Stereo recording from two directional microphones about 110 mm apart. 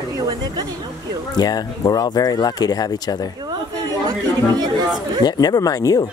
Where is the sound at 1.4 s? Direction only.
35° left (ahead or behind).